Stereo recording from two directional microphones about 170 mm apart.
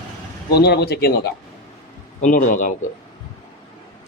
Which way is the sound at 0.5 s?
75° left (ahead or behind).